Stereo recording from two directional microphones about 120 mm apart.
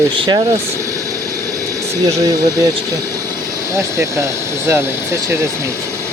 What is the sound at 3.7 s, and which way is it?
Speech, 25° right (ahead or behind).